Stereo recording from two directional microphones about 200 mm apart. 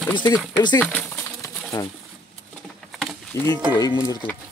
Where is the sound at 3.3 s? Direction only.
15° left (ahead or behind).